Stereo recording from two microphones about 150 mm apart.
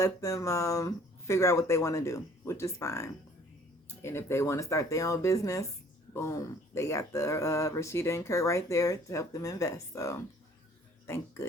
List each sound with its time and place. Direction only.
0.0 s speech: 20° left (ahead or behind)